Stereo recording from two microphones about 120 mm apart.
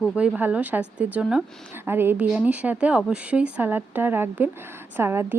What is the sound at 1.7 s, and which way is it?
Speech, 20° right (ahead or behind).